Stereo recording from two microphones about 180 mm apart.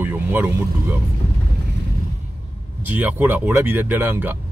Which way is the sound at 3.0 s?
10° right (ahead or behind).